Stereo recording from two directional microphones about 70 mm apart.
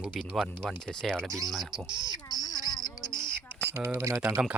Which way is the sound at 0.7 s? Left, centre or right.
Centre.